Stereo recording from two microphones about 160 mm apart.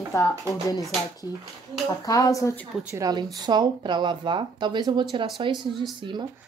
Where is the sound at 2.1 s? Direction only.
20° left (ahead or behind).